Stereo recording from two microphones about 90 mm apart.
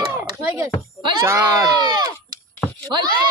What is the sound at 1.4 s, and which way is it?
Speech, 50° right (ahead or behind).